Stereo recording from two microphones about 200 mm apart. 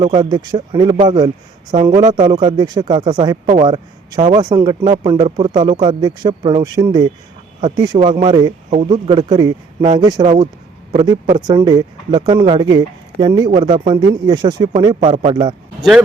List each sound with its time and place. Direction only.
0.1 s a man's voice: 20° right (ahead or behind)
11.3 s speech: 20° right (ahead or behind)
15.8 s speech: centre (ahead or behind)